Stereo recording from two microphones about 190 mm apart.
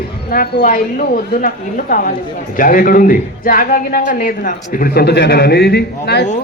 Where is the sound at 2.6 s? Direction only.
45° left (ahead or behind).